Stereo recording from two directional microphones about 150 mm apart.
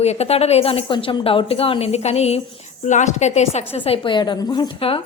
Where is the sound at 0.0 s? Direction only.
45° left (ahead or behind).